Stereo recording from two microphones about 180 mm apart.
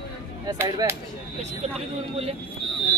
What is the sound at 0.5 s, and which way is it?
Speech, 20° right (ahead or behind).